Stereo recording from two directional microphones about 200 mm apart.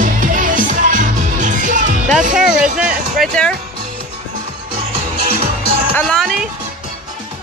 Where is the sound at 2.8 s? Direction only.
5° right (ahead or behind).